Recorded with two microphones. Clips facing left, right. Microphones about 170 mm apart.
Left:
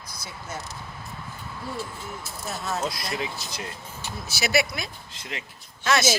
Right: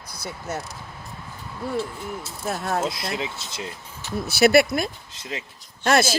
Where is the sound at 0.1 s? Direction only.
65° right (ahead or behind).